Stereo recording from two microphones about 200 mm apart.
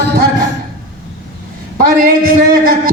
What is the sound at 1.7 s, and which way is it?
A man's voice, 45° right (ahead or behind).